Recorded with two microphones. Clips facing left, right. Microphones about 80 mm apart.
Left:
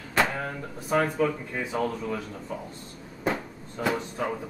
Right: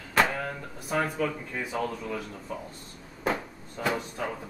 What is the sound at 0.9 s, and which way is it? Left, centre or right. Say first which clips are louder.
Speech: left 4 dB; centre.